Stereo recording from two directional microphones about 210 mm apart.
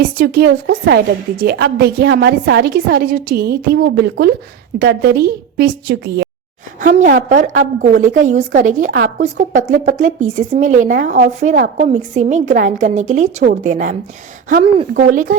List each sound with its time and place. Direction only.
0.2 s a woman's voice: 45° right (ahead or behind)
14.9 s speech: 40° right (ahead or behind)